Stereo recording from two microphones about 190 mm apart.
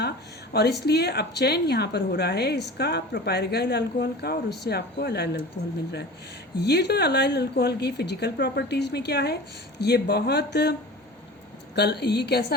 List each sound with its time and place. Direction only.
0.5 s a woman's voice: 60° left (ahead or behind)
6.6 s a woman's voice: 60° left (ahead or behind)